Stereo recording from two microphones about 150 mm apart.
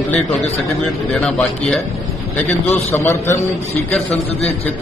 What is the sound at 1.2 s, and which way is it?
Speech, 5° left (ahead or behind).